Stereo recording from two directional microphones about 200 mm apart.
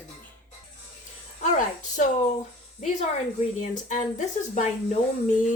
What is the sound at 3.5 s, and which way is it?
Speech, 40° left (ahead or behind).